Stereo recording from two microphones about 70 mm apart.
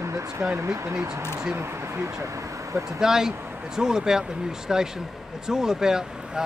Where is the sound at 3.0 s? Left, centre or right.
Centre.